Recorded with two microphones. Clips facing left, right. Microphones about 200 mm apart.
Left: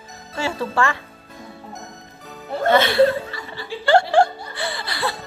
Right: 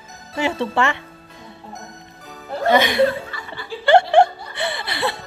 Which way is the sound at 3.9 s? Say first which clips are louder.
Right 2 dB; 20° right (ahead or behind).